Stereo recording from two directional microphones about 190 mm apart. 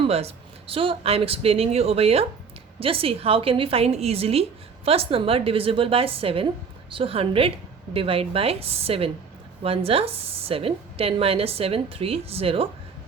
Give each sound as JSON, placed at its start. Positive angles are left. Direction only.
{"t": 0.0, "sound": "a woman's voice", "side_deg": -35}